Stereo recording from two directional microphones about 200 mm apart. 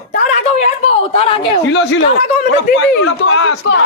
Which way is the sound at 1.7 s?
65° left (ahead or behind).